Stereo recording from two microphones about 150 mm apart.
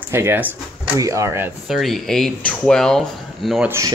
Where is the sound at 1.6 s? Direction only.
Centre (ahead or behind).